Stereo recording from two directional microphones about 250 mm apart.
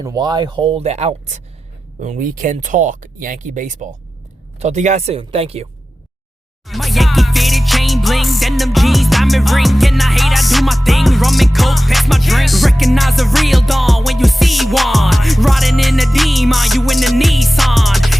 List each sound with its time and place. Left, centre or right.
0.0 s speech: centre
6.7 s music: centre